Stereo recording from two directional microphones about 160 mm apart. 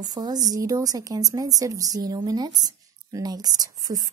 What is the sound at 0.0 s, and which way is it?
Speech, 25° right (ahead or behind).